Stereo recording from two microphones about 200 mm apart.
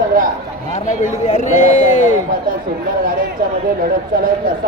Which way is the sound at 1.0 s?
40° left (ahead or behind).